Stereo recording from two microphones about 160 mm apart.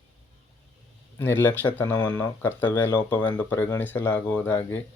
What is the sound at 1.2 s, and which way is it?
Speech, 15° left (ahead or behind).